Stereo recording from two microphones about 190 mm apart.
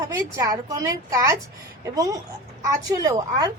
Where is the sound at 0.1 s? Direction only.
20° right (ahead or behind).